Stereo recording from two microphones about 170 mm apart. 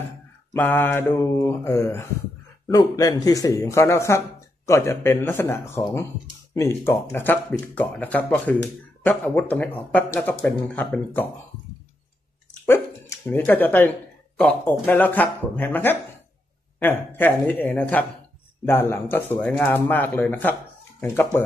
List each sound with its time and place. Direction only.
0.5 s speech: 10° left (ahead or behind)
13.2 s speech: 10° left (ahead or behind)